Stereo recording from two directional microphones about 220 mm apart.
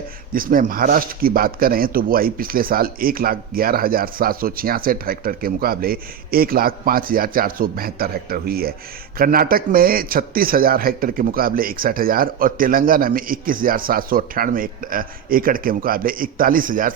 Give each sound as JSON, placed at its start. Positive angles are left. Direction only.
{"t": 0.3, "sound": "speech", "side_deg": -40}